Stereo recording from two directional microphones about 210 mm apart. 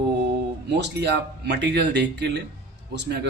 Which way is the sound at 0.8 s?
55° right (ahead or behind).